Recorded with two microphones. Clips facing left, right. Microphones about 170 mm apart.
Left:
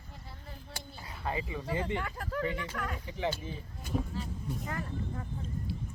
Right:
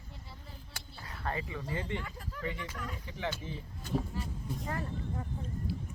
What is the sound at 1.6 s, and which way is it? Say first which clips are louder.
Speech: left 4 dB; 70° left (ahead or behind).